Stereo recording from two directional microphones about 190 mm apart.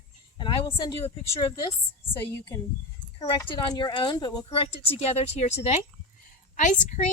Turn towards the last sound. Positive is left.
turn(degrees=40)  # may be behind; listen again after turning